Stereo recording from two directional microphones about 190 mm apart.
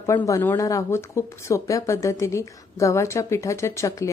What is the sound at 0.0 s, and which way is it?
Speech, 15° left (ahead or behind).